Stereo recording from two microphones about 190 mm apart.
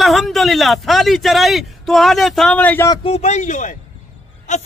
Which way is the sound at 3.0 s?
35° left (ahead or behind).